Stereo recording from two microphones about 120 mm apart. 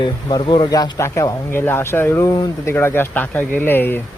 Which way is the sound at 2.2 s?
35° left (ahead or behind).